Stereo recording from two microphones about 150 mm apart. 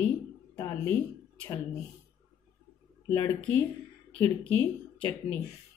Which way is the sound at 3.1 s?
15° left (ahead or behind).